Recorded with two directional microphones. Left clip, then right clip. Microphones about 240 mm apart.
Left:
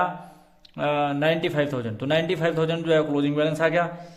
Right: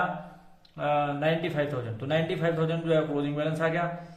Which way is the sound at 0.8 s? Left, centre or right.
Left.